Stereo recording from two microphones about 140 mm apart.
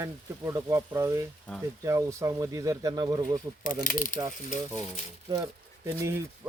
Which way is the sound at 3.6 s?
75° left (ahead or behind).